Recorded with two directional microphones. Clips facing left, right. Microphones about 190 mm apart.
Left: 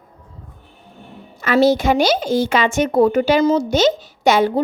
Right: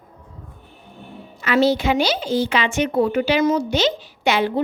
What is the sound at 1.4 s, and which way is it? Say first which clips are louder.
A woman's voice: left 3 dB; 45° left (ahead or behind).